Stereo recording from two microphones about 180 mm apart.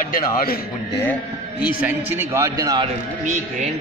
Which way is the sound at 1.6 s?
10° right (ahead or behind).